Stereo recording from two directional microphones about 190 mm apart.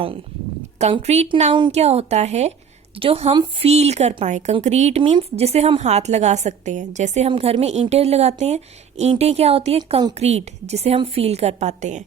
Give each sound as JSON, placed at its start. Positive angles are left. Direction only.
{"t": 0.8, "sound": "speech", "side_deg": -35}